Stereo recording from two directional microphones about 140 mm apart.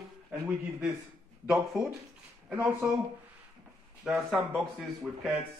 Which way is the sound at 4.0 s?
Centre (ahead or behind).